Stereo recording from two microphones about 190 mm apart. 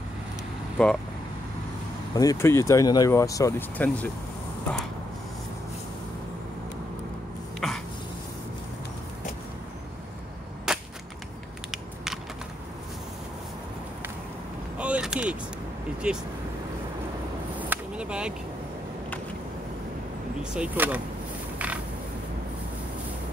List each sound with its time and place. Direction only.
0.8 s speech: 5° left (ahead or behind)
2.1 s speech: 15° left (ahead or behind)
7.6 s throat clearing: centre (ahead or behind)
10.7 s cap gun: 5° right (ahead or behind)
11.7 s a sound: centre (ahead or behind)
14.8 s a sound: 5° right (ahead or behind)
16.0 s speech: 5° right (ahead or behind)
17.6 s a sound: 5° right (ahead or behind)
20.5 s speech: 10° right (ahead or behind)